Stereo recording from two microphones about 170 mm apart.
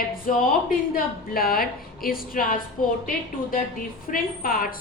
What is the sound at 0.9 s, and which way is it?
A woman's voice, 60° left (ahead or behind).